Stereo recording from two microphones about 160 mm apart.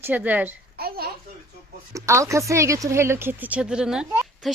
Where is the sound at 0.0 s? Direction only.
10° right (ahead or behind).